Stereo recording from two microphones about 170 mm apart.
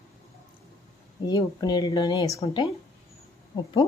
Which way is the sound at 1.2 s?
25° left (ahead or behind).